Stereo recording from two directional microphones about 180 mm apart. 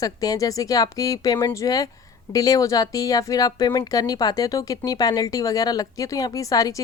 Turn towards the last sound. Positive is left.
turn(degrees=20)  # may be behind; listen again after turning